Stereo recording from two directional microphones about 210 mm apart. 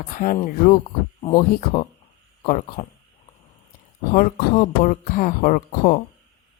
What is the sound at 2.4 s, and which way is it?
Speech, 35° left (ahead or behind).